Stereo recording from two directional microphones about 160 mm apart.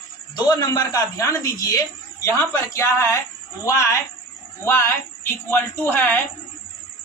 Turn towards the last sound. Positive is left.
turn(degrees=15)  # may be behind; listen again after turning